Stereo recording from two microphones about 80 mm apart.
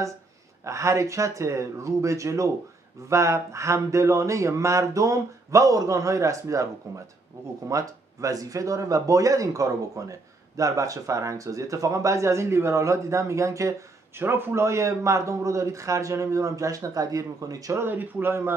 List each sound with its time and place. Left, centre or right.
0.7 s speech: right
14.2 s speech: right
17.7 s speech: right